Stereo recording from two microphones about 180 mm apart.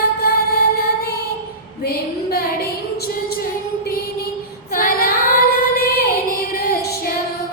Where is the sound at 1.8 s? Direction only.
55° left (ahead or behind).